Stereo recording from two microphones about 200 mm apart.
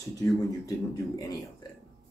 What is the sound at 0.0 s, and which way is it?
A man's voice, 20° left (ahead or behind).